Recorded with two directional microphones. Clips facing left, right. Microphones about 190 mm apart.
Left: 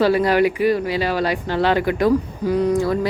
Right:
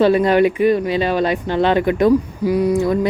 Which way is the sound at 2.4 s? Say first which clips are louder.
Even; 10° right (ahead or behind).